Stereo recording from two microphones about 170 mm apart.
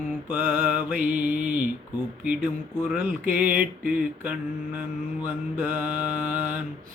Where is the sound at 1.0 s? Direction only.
50° right (ahead or behind).